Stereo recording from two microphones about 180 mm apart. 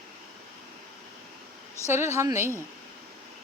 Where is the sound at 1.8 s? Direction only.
15° right (ahead or behind).